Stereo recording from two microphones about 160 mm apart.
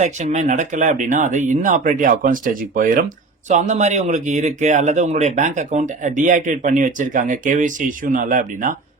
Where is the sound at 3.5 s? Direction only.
50° right (ahead or behind).